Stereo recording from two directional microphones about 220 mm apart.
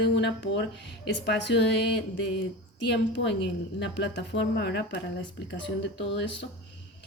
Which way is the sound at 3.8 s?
55° left (ahead or behind).